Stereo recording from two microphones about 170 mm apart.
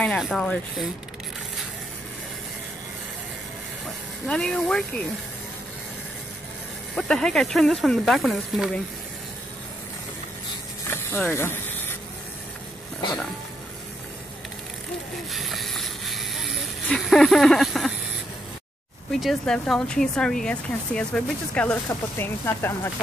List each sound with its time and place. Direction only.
0.0 s speech: 5° left (ahead or behind)
3.8 s speech: centre (ahead or behind)
7.0 s speech: 5° left (ahead or behind)
10.9 s spray: 10° left (ahead or behind)
15.3 s bicycle: centre (ahead or behind)
19.1 s speech: centre (ahead or behind)